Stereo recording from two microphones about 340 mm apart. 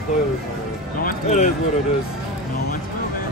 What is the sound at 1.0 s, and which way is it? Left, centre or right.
Speech, left.